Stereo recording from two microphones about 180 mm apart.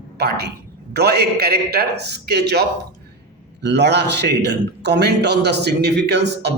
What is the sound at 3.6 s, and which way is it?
A man's voice, 70° right (ahead or behind).